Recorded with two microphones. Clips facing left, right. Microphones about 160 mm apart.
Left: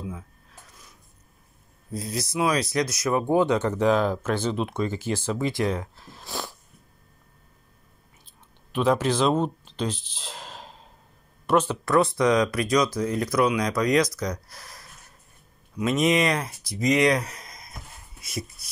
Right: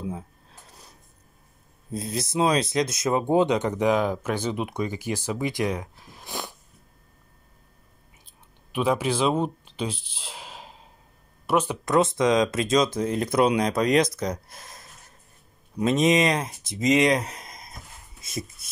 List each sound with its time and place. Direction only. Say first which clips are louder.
0.1 s mechanisms: right 4 dB; 30° right (ahead or behind)
1.9 s speech: right 1 dB; 25° right (ahead or behind)
8.7 s speech: left 2 dB; 10° right (ahead or behind)